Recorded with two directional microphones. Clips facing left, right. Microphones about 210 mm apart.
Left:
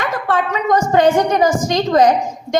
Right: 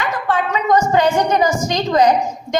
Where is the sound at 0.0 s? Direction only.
50° left (ahead or behind).